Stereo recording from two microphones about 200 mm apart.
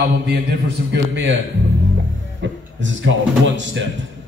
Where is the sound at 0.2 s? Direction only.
55° right (ahead or behind).